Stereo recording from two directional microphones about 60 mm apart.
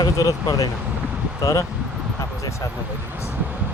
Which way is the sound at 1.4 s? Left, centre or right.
Left.